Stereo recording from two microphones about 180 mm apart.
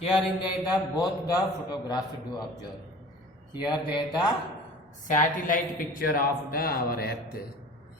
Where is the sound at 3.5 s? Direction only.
25° left (ahead or behind).